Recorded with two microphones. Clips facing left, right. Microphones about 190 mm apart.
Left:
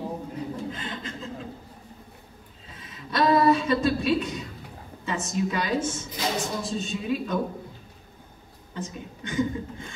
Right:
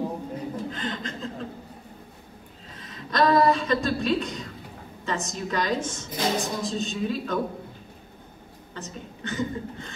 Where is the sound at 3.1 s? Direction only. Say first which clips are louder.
Even; 10° left (ahead or behind).